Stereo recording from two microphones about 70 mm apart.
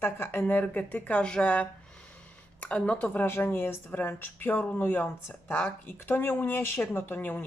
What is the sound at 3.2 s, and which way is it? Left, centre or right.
A woman's voice, left.